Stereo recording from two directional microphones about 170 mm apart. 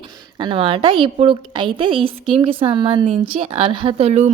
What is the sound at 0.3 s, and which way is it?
A woman's voice, 30° right (ahead or behind).